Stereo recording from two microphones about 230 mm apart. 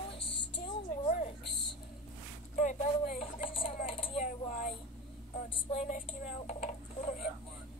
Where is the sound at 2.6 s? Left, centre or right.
Left.